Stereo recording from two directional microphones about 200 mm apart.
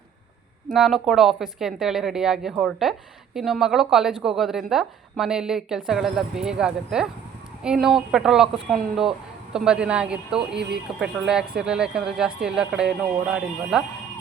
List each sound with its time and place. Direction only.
0.7 s a woman's voice: centre (ahead or behind)